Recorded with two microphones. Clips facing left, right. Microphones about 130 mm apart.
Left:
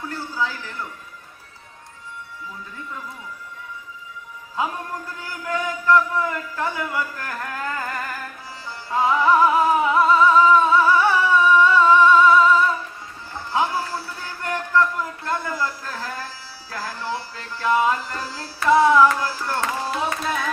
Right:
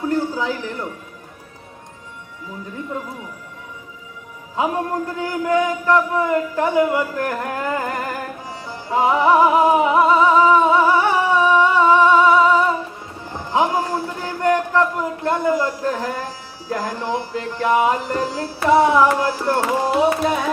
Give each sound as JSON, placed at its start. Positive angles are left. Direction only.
{"t": 0.1, "sound": "a sound", "side_deg": -20}
{"t": 4.5, "sound": "music", "side_deg": -20}
{"t": 5.2, "sound": "a man's voice", "side_deg": -20}
{"t": 7.2, "sound": "music", "side_deg": -20}
{"t": 19.0, "sound": "a man's voice", "side_deg": -20}
{"t": 19.6, "sound": "music", "side_deg": -15}